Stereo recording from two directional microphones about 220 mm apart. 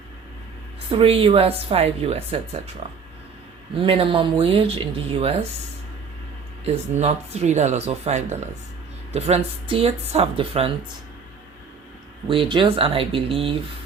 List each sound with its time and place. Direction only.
0.9 s a woman's voice: 25° right (ahead or behind)
6.7 s a woman's voice: 30° right (ahead or behind)
12.3 s a woman's voice: 25° right (ahead or behind)